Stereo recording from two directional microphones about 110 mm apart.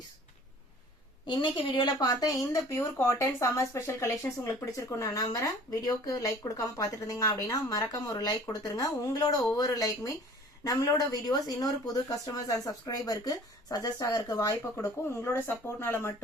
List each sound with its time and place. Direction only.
1.3 s speech: 50° left (ahead or behind); by 16.1 s 20° left (ahead or behind)